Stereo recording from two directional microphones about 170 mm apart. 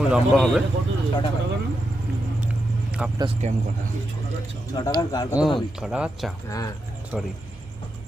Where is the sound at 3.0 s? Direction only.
5° right (ahead or behind).